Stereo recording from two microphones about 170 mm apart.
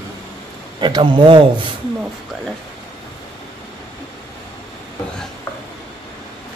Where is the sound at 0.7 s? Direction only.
25° right (ahead or behind).